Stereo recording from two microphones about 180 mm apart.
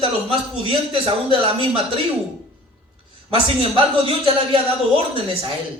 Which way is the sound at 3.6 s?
30° right (ahead or behind).